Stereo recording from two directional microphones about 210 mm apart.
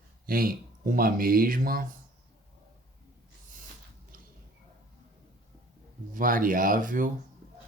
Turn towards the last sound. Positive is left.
turn(degrees=-40)  # may be behind; listen again after turning